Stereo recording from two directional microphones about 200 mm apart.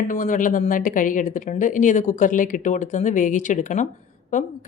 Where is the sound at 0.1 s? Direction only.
40° left (ahead or behind).